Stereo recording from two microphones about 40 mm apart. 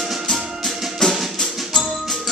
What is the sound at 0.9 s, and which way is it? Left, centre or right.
Music, centre.